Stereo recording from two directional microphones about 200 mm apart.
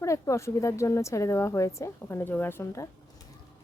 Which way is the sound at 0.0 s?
15° left (ahead or behind).